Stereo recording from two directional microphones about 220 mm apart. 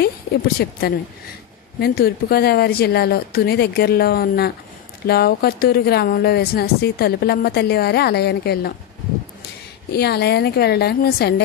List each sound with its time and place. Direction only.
0.6 s speech: 45° left (ahead or behind)
9.9 s speech: 45° left (ahead or behind)